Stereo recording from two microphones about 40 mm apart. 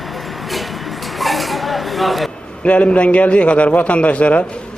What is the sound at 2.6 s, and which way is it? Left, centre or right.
Speech, left.